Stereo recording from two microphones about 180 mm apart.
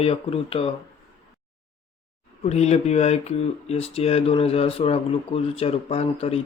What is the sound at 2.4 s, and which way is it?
Speech, 35° left (ahead or behind).